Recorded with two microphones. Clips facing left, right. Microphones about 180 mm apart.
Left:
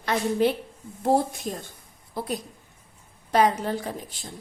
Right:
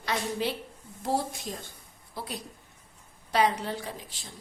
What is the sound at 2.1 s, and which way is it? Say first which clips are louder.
A woman's voice: left 7 dB; 50° left (ahead or behind).